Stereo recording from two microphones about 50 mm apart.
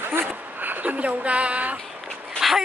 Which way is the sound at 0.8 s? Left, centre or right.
Right.